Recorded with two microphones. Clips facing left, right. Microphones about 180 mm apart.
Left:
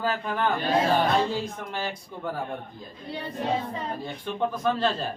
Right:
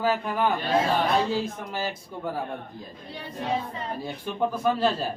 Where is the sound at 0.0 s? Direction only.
10° right (ahead or behind).